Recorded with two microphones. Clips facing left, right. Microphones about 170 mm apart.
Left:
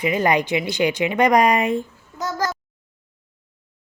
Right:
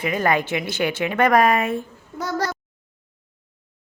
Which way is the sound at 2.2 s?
60° right (ahead or behind).